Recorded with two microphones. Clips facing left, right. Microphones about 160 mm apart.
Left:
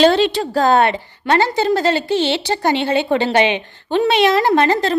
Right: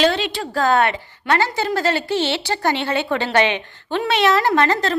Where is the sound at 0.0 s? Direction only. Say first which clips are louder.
Left 6 dB; 35° left (ahead or behind).